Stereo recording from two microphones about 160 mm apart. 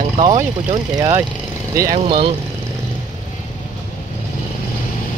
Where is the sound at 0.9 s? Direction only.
25° right (ahead or behind).